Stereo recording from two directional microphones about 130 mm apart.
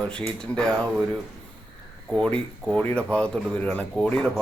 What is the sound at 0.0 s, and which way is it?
A man's voice, 10° left (ahead or behind).